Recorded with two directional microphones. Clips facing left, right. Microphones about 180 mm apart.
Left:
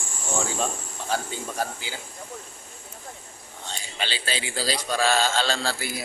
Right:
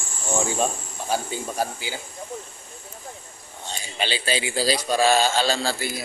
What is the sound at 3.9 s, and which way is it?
A man's voice, 15° right (ahead or behind).